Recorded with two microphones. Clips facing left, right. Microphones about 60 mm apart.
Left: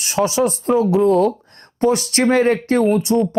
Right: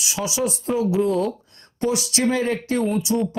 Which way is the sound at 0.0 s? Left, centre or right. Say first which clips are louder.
Left 7 dB; left.